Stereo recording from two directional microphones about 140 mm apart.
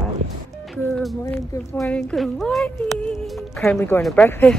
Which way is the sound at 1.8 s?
5° left (ahead or behind).